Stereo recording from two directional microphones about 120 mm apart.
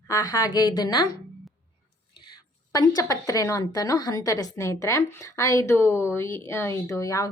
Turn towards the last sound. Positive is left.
turn(degrees=30)  # may be behind; listen again after turning